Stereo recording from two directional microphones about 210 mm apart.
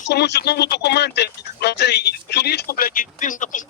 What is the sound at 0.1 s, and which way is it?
Speech, 55° left (ahead or behind).